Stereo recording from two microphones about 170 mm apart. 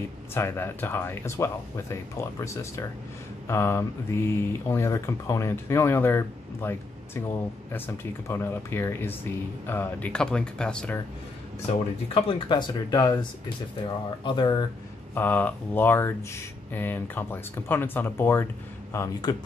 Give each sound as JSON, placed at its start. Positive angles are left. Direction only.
{"t": 0.3, "sound": "speech", "side_deg": 15}
{"t": 12.1, "sound": "speech", "side_deg": 30}
{"t": 15.1, "sound": "speech", "side_deg": 10}